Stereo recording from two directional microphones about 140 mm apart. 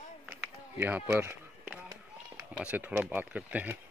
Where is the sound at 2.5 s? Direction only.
10° right (ahead or behind).